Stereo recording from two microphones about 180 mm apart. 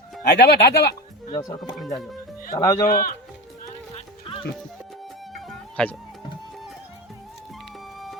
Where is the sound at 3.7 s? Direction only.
30° left (ahead or behind).